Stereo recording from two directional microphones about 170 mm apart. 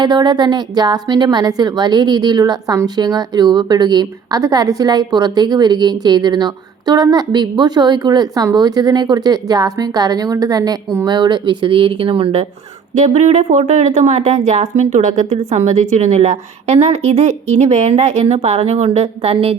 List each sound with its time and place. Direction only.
0.0 s a woman's voice: 25° right (ahead or behind)